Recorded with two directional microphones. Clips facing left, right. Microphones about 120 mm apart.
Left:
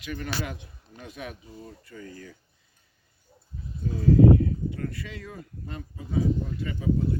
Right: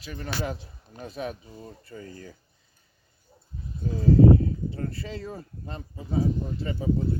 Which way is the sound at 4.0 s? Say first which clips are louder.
Even; 30° right (ahead or behind).